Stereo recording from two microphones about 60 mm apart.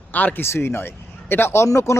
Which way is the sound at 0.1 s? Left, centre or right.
Left.